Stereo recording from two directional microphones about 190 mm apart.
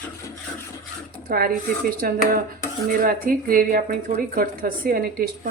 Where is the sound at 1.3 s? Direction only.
50° right (ahead or behind).